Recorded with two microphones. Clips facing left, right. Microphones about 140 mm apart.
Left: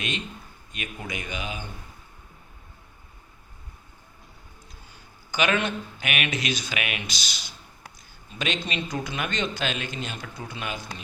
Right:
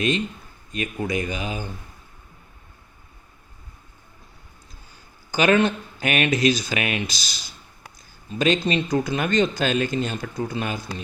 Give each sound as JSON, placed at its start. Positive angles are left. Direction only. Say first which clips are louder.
{"t": 0.7, "sound": "speech", "louder": "right 9 dB", "side_deg": -35}
{"t": 5.3, "sound": "speech", "louder": "right 6 dB", "side_deg": -35}